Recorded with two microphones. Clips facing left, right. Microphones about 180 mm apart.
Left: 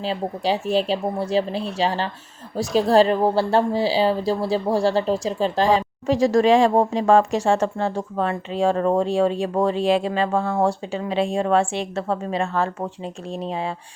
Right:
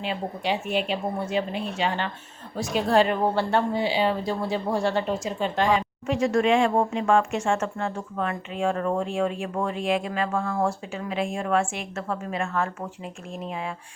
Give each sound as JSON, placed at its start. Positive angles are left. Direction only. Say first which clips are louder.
{"t": 0.0, "sound": "a woman's voice", "louder": "left 5 dB", "side_deg": 35}